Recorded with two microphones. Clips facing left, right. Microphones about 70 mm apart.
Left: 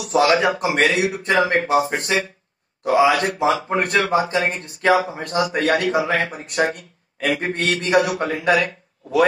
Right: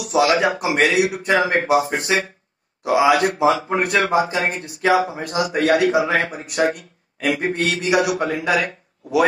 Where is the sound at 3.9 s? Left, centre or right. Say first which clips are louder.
Even; right.